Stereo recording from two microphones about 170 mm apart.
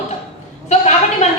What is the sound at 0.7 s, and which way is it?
Speech, 40° left (ahead or behind).